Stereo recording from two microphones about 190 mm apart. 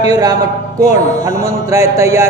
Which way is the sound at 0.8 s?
15° right (ahead or behind).